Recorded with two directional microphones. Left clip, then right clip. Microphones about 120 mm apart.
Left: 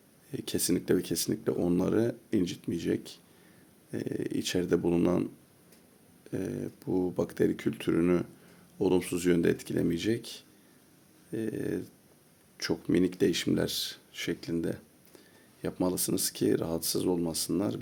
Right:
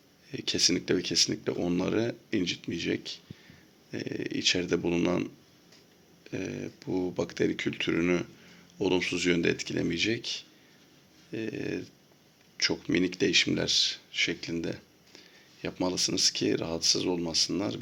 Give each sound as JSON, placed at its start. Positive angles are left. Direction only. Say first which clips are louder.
{"t": 0.3, "sound": "speech", "louder": "right 5 dB", "side_deg": 40}